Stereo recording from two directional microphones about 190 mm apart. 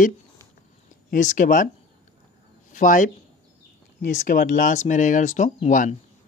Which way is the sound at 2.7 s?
45° left (ahead or behind).